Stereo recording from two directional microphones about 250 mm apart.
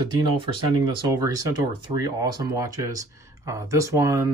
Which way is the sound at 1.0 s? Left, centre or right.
Centre.